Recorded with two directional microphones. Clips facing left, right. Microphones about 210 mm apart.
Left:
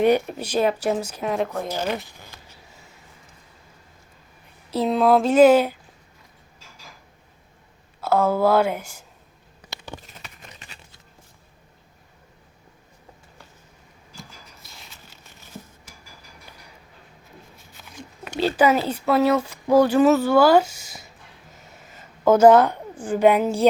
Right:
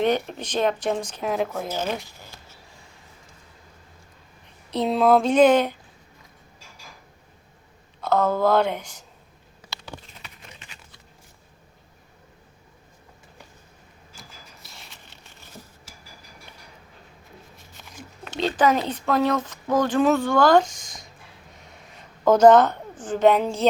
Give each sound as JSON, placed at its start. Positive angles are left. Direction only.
{"t": 0.0, "sound": "speech", "side_deg": 10}
{"t": 4.7, "sound": "speech", "side_deg": 0}
{"t": 8.0, "sound": "speech", "side_deg": 10}
{"t": 10.2, "sound": "a sound", "side_deg": 40}
{"t": 14.2, "sound": "rub", "side_deg": 0}
{"t": 18.3, "sound": "speech", "side_deg": 10}
{"t": 21.5, "sound": "a sound", "side_deg": 5}